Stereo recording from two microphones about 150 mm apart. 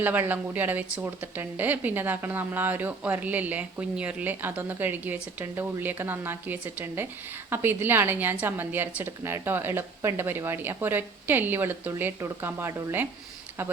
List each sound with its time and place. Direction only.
0.0 s a woman's voice: 10° right (ahead or behind)